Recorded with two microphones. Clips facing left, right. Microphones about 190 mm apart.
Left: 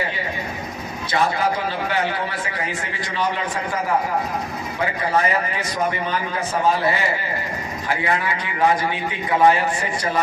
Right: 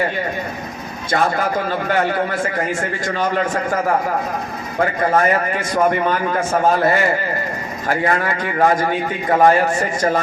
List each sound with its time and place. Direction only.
1.1 s a man's voice: 50° right (ahead or behind)